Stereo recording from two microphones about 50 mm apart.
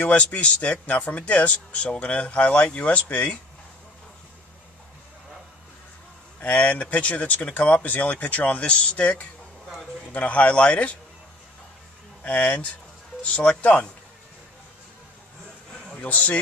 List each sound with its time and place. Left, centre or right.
0.0 s a man's voice: left
6.4 s a man's voice: left
10.1 s a man's voice: left
12.2 s a man's voice: left
16.0 s a man's voice: left